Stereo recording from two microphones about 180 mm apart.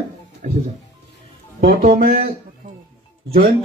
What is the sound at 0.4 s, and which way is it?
Music, 50° right (ahead or behind).